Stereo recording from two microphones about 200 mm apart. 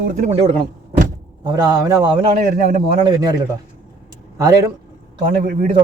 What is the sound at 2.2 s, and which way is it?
Speech, 30° right (ahead or behind).